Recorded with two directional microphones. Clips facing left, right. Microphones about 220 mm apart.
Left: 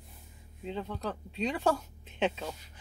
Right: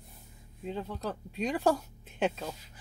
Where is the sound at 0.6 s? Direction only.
10° right (ahead or behind).